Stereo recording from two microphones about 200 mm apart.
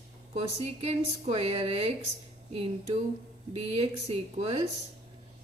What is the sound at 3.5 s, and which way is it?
Speech, 30° right (ahead or behind).